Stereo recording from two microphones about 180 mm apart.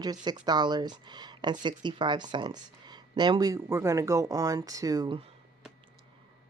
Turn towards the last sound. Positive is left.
turn(degrees=-25)  # may be behind; listen again after turning